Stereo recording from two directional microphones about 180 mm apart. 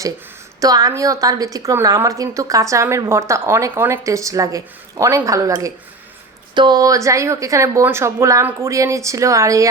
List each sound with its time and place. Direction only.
0.6 s a woman's voice: 20° right (ahead or behind)